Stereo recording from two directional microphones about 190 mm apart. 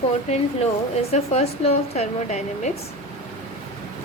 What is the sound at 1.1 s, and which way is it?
A woman's voice, 35° left (ahead or behind).